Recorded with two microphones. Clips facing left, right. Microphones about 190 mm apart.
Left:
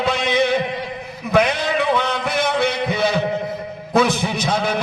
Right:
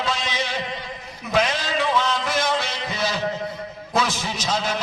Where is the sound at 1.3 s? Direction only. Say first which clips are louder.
Left 5 dB; 60° left (ahead or behind).